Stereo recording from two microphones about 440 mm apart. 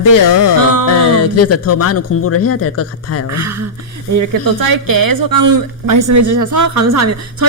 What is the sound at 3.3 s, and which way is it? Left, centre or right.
Speech, right.